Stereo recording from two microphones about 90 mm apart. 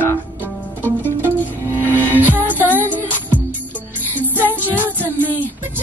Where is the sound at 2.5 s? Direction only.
20° left (ahead or behind).